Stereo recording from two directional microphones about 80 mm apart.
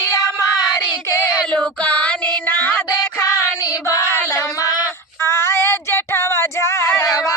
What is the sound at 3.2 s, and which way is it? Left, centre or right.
Female singing, left.